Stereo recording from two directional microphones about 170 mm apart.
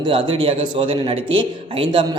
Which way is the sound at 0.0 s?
30° right (ahead or behind).